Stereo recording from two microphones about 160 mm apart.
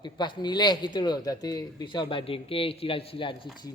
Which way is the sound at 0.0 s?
30° left (ahead or behind).